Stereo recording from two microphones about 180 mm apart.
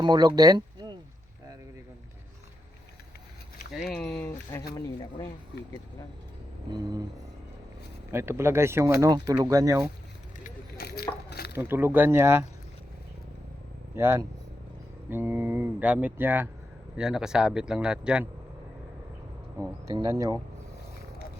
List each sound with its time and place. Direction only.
0.0 s speech: 25° right (ahead or behind)
3.7 s a sound: centre (ahead or behind)
4.7 s speech: 25° left (ahead or behind)
6.7 s speech: 20° right (ahead or behind)
8.1 s speech: 15° right (ahead or behind)
10.4 s a sound: 60° left (ahead or behind)
11.5 s speech: 10° right (ahead or behind)
13.9 s speech: 15° right (ahead or behind)
19.5 s speech: 20° right (ahead or behind)